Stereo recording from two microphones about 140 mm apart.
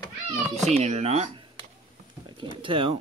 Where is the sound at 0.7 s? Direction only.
50° right (ahead or behind).